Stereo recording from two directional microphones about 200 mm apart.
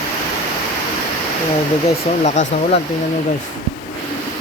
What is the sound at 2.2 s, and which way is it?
Speech, 35° left (ahead or behind).